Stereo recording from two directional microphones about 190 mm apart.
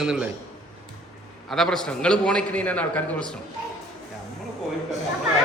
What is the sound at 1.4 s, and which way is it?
A man's voice, centre (ahead or behind).